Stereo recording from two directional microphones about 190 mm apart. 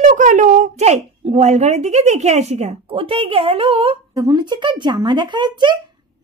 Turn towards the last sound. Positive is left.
turn(degrees=-25)  # may be behind; listen again after turning